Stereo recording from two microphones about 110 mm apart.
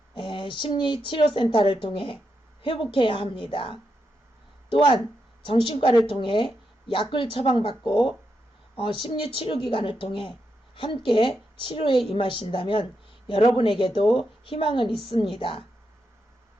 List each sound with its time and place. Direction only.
0.1 s a woman's voice: 50° left (ahead or behind)